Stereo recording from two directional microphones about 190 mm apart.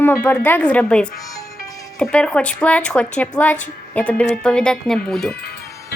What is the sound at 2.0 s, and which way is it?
Speech, 5° left (ahead or behind).